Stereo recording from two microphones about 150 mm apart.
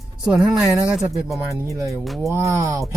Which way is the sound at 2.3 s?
20° right (ahead or behind).